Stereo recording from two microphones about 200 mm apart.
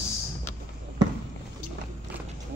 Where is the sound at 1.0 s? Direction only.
20° right (ahead or behind).